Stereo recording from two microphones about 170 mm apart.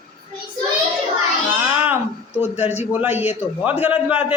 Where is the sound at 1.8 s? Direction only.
10° right (ahead or behind).